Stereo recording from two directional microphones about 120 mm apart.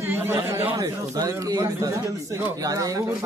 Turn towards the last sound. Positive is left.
turn(degrees=-30)  # may be behind; listen again after turning